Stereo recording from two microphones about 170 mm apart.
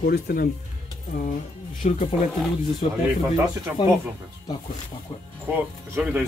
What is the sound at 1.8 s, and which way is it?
Speech, 40° left (ahead or behind).